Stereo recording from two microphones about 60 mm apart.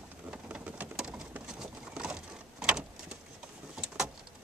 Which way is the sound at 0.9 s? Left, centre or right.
Centre.